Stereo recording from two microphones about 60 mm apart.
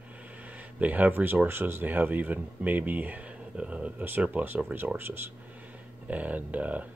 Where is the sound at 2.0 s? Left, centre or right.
Right.